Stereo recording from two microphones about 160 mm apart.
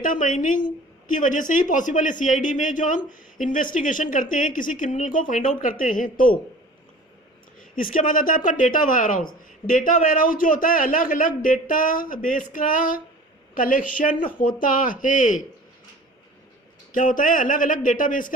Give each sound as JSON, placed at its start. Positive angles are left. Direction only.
{"t": 0.0, "sound": "a man's voice", "side_deg": 55}
{"t": 7.8, "sound": "a man's voice", "side_deg": 60}
{"t": 16.9, "sound": "a man's voice", "side_deg": 55}